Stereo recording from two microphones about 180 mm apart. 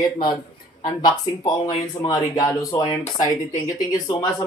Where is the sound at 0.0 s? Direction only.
25° left (ahead or behind).